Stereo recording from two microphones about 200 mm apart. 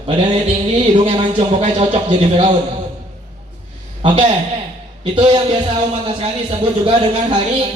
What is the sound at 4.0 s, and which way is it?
Speech, 25° right (ahead or behind).